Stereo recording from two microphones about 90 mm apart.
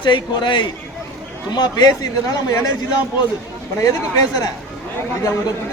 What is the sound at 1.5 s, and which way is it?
Speech, 50° left (ahead or behind).